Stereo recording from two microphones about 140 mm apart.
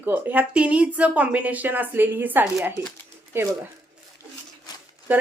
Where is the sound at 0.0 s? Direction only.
15° right (ahead or behind).